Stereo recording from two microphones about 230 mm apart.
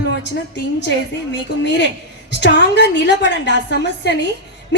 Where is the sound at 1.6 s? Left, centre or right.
Left.